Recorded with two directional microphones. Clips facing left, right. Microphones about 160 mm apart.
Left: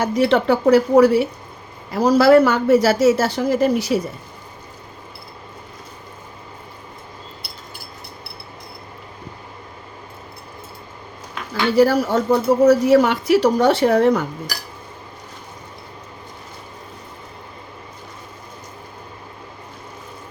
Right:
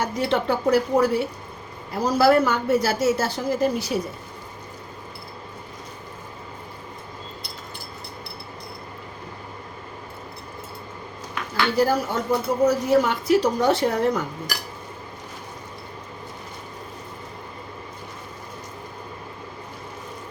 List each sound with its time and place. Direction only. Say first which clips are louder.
0.0 s speech: left 6 dB; 90° left
11.8 s speech: left 7 dB; 90° left